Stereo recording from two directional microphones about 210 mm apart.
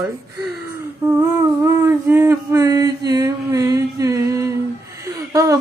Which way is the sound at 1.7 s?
10° right (ahead or behind).